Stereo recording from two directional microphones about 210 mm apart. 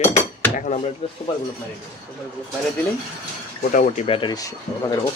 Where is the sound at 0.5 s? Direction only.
35° left (ahead or behind).